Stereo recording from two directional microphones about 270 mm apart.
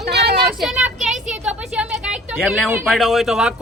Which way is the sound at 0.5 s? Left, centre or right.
Centre.